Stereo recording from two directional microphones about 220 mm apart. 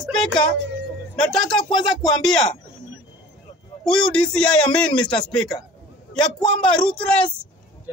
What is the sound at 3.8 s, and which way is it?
A man's voice, 5° left (ahead or behind).